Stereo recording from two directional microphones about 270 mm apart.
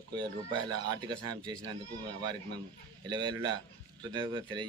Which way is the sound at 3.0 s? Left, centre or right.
Centre.